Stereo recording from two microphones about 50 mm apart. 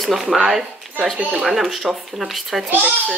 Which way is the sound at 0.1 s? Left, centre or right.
Centre.